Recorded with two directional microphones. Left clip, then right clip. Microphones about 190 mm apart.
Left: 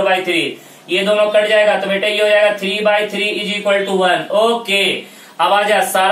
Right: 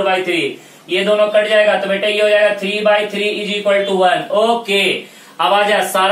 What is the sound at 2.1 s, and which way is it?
A man's voice, centre (ahead or behind).